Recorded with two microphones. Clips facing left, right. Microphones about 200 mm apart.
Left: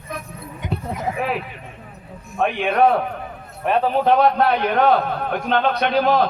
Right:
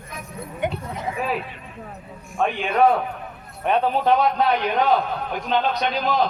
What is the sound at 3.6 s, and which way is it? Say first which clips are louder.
Speech: left 1 dB; centre (ahead or behind).